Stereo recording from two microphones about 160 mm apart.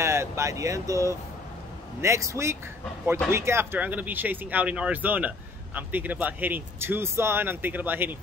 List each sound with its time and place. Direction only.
0.0 s speech: 15° right (ahead or behind)